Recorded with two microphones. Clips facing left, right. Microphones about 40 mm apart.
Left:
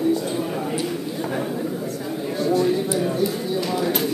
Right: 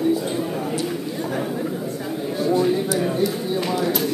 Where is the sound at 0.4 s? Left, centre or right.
Centre.